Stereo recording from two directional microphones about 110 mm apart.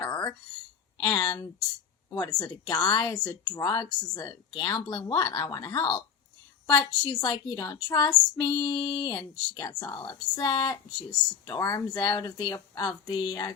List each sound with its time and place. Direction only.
0.1 s a sound: 40° left (ahead or behind)
0.9 s female singing: 35° left (ahead or behind)
2.0 s speech: 30° left (ahead or behind)
2.6 s female singing: 40° left (ahead or behind)